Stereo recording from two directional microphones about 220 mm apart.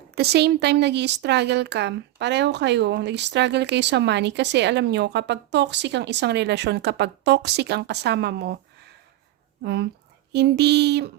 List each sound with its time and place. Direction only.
0.2 s speech: 50° right (ahead or behind)
9.6 s speech: 50° right (ahead or behind)